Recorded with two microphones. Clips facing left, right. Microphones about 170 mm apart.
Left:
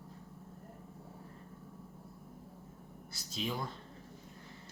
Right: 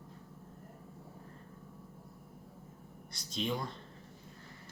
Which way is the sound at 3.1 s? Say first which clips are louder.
Right 3 dB; 5° left (ahead or behind).